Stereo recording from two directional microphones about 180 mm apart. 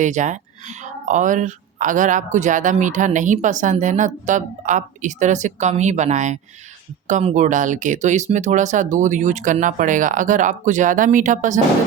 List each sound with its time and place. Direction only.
0.0 s speech: 40° right (ahead or behind)